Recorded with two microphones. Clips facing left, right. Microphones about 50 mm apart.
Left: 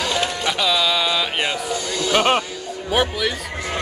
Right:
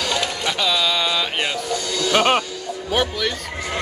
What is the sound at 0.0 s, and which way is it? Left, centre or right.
Music, centre.